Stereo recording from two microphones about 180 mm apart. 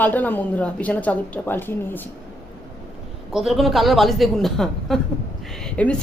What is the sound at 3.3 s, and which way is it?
A woman's voice, centre (ahead or behind).